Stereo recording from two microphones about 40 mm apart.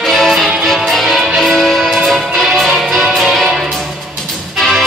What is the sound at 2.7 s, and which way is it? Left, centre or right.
Music, centre.